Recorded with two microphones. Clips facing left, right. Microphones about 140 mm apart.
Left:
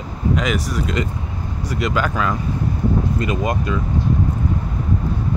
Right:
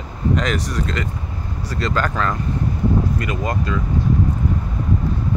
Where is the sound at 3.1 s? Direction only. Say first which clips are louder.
Left 2 dB; 20° left (ahead or behind).